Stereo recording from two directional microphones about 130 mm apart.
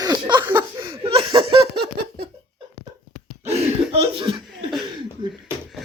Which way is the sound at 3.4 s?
50° right (ahead or behind).